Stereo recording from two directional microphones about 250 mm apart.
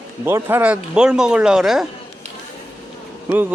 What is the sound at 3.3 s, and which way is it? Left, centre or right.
Speech, centre.